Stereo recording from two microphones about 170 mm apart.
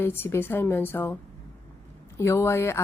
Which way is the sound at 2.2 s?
15° left (ahead or behind).